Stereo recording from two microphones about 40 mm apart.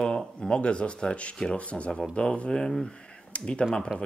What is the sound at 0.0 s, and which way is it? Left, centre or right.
Speech, left.